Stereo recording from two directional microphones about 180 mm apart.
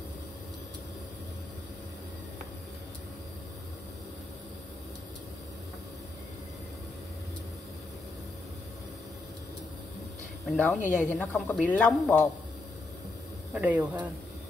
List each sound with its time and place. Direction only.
10.4 s a woman's voice: 5° left (ahead or behind)
13.5 s speech: 5° right (ahead or behind)